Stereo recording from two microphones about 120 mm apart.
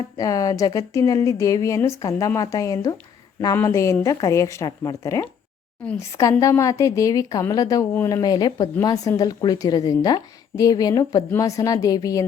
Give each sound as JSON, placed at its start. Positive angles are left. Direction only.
{"t": 0.2, "sound": "speech", "side_deg": 30}